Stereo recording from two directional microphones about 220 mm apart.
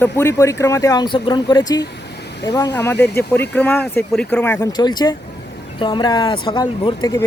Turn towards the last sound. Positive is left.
turn(degrees=15)  # may be behind; listen again after turning